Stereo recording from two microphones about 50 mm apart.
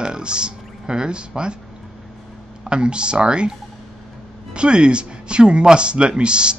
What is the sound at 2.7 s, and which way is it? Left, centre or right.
Speech, centre.